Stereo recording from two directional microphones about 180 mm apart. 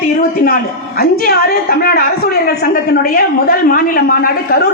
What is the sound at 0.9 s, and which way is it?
A woman's voice, 60° left (ahead or behind).